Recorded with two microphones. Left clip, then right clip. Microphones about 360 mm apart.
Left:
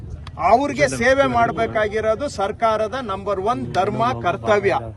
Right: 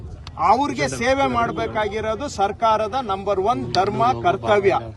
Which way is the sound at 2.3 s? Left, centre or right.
Centre.